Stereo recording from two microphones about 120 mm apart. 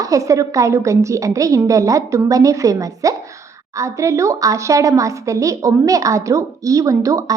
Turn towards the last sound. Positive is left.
turn(degrees=-30)  # may be behind; listen again after turning